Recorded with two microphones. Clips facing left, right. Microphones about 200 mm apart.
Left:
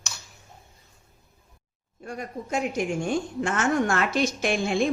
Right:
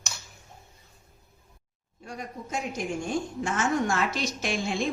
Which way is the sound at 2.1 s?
55° left (ahead or behind).